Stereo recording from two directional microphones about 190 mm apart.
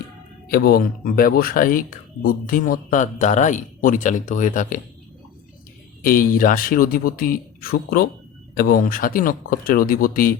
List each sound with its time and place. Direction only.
0.4 s speech: 55° left (ahead or behind)
6.0 s speech: 50° left (ahead or behind)